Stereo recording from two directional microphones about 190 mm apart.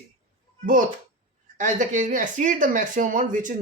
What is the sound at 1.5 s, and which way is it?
Speech, 40° right (ahead or behind).